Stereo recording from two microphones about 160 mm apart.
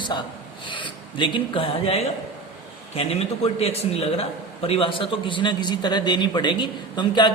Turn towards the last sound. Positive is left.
turn(degrees=25)  # may be behind; listen again after turning